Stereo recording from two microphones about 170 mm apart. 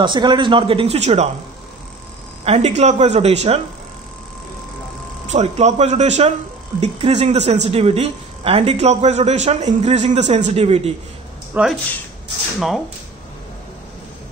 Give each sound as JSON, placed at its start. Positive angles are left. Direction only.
{"t": 0.0, "sound": "a man's voice", "side_deg": -25}
{"t": 2.4, "sound": "a man's voice", "side_deg": -40}
{"t": 5.3, "sound": "a man's voice", "side_deg": -40}
{"t": 11.6, "sound": "speech", "side_deg": -10}